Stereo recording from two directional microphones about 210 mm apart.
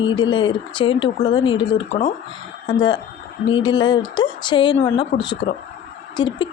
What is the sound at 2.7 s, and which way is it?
Speech, 25° left (ahead or behind).